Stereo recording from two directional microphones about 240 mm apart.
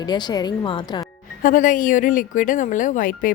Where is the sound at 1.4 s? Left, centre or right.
Left.